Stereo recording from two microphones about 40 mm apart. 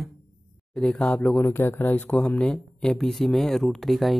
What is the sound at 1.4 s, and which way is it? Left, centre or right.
Speech, left.